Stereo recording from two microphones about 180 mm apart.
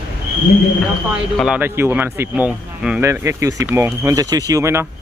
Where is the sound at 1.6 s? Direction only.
15° right (ahead or behind).